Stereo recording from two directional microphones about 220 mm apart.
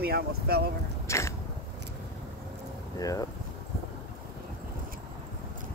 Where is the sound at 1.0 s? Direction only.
15° left (ahead or behind).